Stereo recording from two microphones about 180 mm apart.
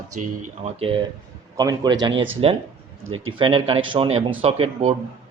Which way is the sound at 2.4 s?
30° right (ahead or behind).